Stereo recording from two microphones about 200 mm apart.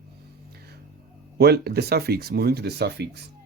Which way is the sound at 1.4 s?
55° right (ahead or behind).